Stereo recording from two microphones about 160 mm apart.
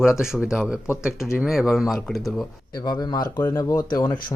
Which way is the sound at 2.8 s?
25° left (ahead or behind).